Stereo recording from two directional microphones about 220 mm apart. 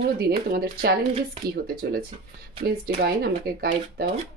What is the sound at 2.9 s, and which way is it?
Speech, 45° right (ahead or behind).